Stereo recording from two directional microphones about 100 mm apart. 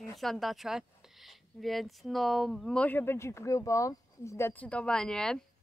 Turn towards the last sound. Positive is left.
turn(degrees=5)  # may be behind; listen again after turning